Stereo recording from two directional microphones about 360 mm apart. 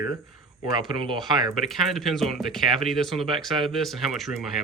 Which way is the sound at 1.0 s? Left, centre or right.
Centre.